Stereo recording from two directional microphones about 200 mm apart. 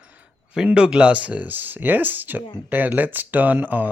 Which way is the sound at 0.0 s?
5° right (ahead or behind).